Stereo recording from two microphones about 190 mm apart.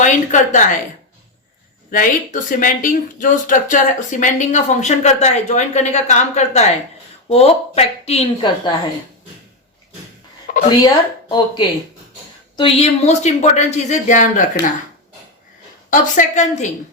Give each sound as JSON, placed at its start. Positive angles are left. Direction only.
{"t": 0.0, "sound": "a woman's voice", "side_deg": 40}
{"t": 1.9, "sound": "speech", "side_deg": 45}
{"t": 10.4, "sound": "a sound", "side_deg": 45}
{"t": 10.8, "sound": "speech", "side_deg": 25}
{"t": 15.9, "sound": "speech", "side_deg": 40}